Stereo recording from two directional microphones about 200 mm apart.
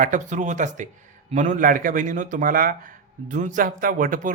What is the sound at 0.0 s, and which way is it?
A man's voice, 40° right (ahead or behind).